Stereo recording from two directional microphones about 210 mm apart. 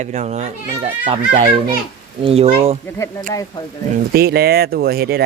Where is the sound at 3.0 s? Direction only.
15° left (ahead or behind).